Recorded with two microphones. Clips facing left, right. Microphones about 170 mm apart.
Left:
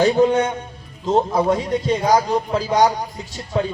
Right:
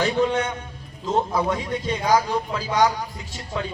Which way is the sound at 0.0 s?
35° left (ahead or behind).